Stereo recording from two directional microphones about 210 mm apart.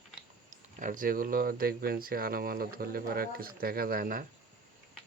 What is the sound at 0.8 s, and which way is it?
Speech, 40° right (ahead or behind).